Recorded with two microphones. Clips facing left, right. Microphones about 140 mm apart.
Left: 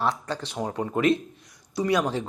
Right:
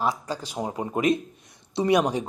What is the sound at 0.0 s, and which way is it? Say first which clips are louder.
Speech: even; 10° right (ahead or behind).